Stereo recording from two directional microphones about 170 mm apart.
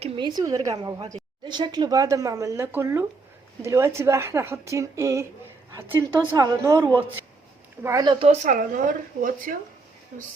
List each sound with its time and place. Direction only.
0.0 s a woman's voice: 25° right (ahead or behind)
7.8 s speech: 15° right (ahead or behind)
8.3 s speech: 50° right (ahead or behind)